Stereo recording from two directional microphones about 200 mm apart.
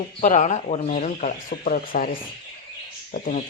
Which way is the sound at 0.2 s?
35° left (ahead or behind).